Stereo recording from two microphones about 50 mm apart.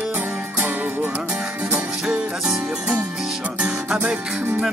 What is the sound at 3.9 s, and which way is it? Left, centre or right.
Music, centre.